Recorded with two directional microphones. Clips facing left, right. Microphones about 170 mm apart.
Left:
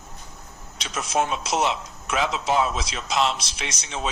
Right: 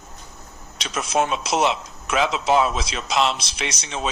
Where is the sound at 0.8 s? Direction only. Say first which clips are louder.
Right 2 dB; 85° right.